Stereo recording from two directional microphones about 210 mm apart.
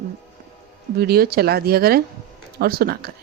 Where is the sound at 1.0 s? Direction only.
45° right (ahead or behind).